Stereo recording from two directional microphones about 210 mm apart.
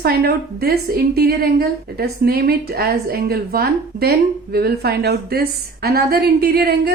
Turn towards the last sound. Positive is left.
turn(degrees=-50)  # may be behind; listen again after turning